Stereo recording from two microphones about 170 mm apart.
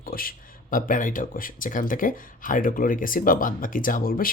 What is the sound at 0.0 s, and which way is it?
Speech, 60° left (ahead or behind).